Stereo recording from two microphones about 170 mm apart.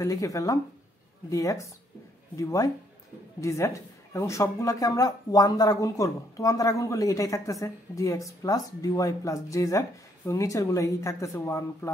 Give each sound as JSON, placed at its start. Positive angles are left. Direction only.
{"t": 0.0, "sound": "speech", "side_deg": 20}